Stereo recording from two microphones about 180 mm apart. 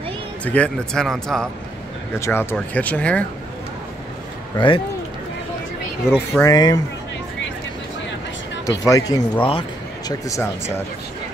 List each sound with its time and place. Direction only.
0.5 s speech: 5° left (ahead or behind)
2.1 s speech: 15° left (ahead or behind)
4.6 s speech: 30° left (ahead or behind)
6.0 s speech: 5° right (ahead or behind)
6.4 s speech: 20° left (ahead or behind)
8.6 s speech: 20° left (ahead or behind)